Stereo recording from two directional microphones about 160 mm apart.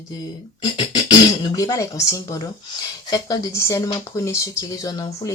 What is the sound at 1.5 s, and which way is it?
Speech, 20° left (ahead or behind).